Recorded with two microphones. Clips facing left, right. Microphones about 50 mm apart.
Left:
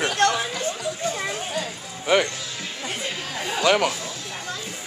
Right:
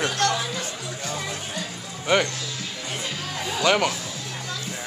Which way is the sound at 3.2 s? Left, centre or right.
Left.